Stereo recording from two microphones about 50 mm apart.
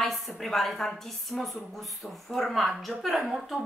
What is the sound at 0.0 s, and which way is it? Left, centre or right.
A woman's voice, centre.